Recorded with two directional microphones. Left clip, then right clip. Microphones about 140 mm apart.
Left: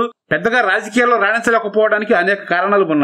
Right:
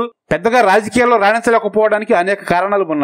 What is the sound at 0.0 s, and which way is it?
Speech, 35° right (ahead or behind).